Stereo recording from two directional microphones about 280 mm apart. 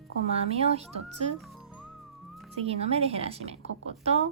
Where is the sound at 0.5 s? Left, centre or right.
Right.